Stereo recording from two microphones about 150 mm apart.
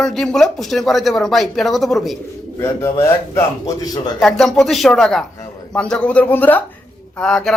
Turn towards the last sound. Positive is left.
turn(degrees=5)  # may be behind; listen again after turning